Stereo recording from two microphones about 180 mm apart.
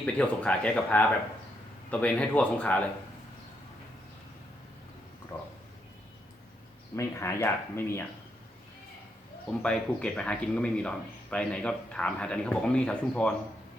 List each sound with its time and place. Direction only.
0.0 s speech: 5° left (ahead or behind)
5.3 s a sound: 15° left (ahead or behind)
6.9 s speech: 15° left (ahead or behind)
9.5 s speech: 5° left (ahead or behind)